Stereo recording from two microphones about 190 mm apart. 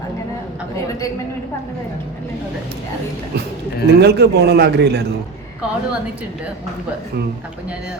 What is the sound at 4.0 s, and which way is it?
Speech, 60° right (ahead or behind).